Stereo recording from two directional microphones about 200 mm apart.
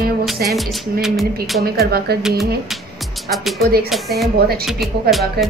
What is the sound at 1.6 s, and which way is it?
Speech, 50° right (ahead or behind).